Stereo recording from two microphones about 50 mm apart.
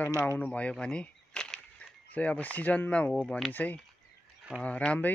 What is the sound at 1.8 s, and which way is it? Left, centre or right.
Speech, left.